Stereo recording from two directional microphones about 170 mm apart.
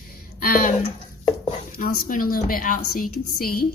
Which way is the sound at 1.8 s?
55° left (ahead or behind).